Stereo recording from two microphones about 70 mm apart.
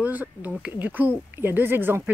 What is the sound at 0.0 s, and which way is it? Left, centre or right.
Speech, right.